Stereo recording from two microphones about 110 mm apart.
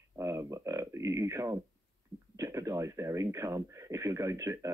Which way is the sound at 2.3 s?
30° right (ahead or behind).